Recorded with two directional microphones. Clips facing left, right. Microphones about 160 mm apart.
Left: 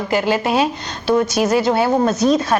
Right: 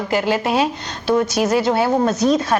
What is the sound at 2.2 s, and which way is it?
Speech, 10° left (ahead or behind).